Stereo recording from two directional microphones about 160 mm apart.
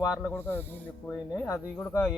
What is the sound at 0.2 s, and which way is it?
Speech, 10° left (ahead or behind).